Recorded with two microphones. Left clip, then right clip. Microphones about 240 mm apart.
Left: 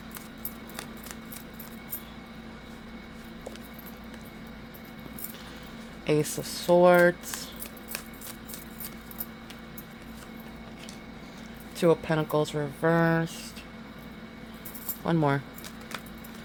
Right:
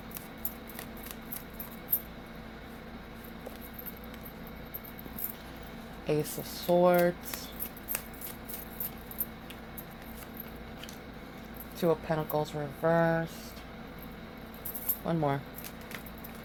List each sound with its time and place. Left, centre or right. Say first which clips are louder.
6.1 s speech: left 5 dB; left
11.8 s speech: left 5 dB; left
15.0 s speech: left 5 dB; left